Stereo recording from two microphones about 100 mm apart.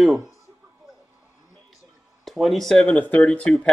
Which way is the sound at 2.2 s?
Centre (ahead or behind).